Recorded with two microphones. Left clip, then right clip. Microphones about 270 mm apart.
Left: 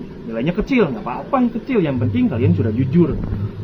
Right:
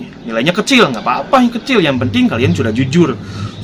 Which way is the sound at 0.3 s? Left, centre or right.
Right.